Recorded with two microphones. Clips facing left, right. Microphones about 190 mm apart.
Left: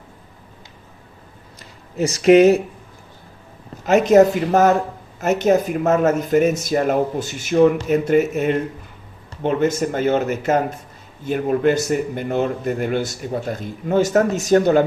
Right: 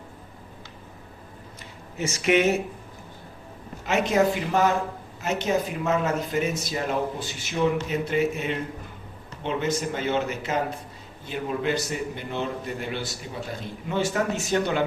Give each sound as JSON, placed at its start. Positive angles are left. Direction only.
{"t": 2.0, "sound": "speech", "side_deg": 35}
{"t": 3.8, "sound": "a man's voice", "side_deg": 45}